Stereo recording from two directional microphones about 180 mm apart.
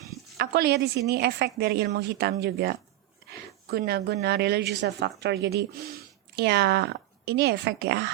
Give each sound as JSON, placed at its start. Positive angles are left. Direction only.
{"t": 0.3, "sound": "a woman's voice", "side_deg": -65}